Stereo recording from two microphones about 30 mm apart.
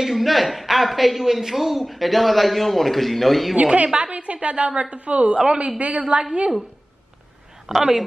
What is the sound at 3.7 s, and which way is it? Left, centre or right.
A woman's voice, right.